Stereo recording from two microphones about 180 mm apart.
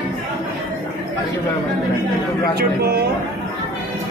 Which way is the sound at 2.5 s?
60° right (ahead or behind).